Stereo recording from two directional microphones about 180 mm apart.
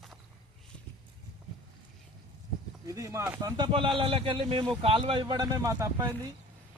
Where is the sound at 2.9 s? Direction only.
15° right (ahead or behind).